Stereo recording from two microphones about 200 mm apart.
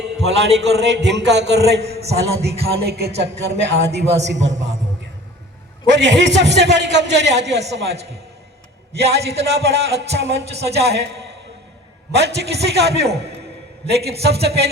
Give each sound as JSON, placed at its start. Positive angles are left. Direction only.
{"t": 0.3, "sound": "speech", "side_deg": -55}
{"t": 5.9, "sound": "speech", "side_deg": -65}
{"t": 12.1, "sound": "speech", "side_deg": -55}